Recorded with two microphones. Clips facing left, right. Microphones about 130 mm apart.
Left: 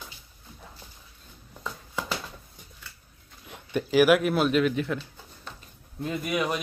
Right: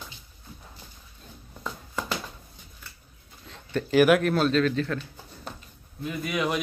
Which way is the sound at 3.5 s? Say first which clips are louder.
Right 1 dB; 15° left (ahead or behind).